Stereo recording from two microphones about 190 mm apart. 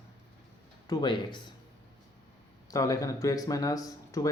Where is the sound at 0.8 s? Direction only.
20° left (ahead or behind).